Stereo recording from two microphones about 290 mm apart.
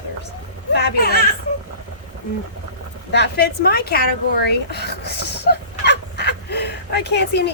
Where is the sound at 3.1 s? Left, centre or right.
Left.